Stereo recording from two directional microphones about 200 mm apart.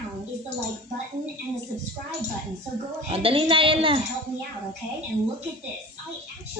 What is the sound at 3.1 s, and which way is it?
Speech, 30° right (ahead or behind).